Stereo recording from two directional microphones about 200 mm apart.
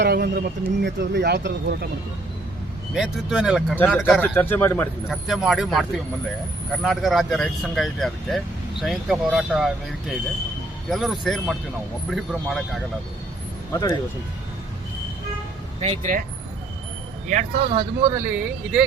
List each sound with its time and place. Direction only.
0.0 s speech: 50° right (ahead or behind)
2.9 s speech: 5° right (ahead or behind)
5.0 s speech: centre (ahead or behind)
6.8 s speech: centre (ahead or behind)
15.8 s speech: 35° right (ahead or behind)
17.2 s speech: 40° right (ahead or behind)
17.7 s speech: 15° right (ahead or behind)